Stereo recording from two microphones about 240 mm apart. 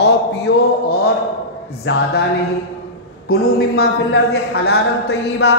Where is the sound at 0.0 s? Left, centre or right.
Left.